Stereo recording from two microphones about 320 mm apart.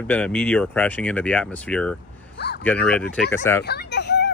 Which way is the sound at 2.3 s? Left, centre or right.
Left.